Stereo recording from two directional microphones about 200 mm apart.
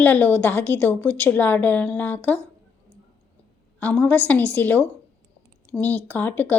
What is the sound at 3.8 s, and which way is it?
A woman's voice, 10° left (ahead or behind).